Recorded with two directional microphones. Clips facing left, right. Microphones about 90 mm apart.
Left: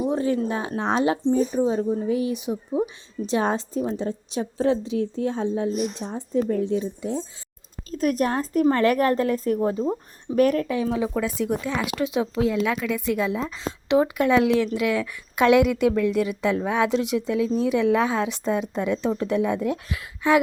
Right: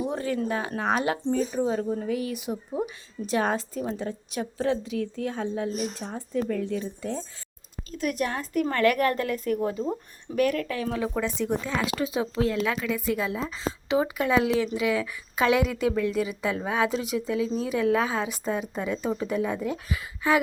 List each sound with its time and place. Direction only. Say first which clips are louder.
0.0 s a woman's voice: left 5 dB; 25° left (ahead or behind)
7.9 s a woman's voice: left 6 dB; 35° left (ahead or behind)
10.8 s speech: left 4 dB; 15° left (ahead or behind)
11.1 s a woman's voice: left 2 dB; 5° left (ahead or behind)